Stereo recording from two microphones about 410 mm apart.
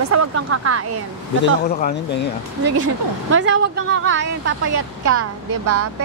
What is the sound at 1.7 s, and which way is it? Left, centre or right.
Speech, left.